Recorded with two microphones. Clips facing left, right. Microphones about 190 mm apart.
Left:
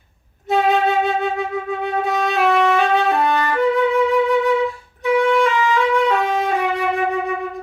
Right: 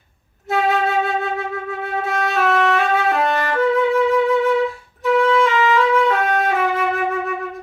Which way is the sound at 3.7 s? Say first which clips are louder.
Right 1 dB; centre (ahead or behind).